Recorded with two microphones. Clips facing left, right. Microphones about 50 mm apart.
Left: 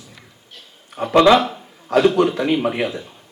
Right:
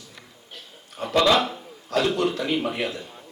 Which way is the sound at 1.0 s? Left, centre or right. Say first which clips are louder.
Left 7 dB; left.